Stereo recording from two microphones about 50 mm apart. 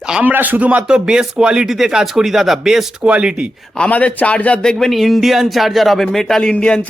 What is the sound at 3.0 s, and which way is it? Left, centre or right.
Speech, right.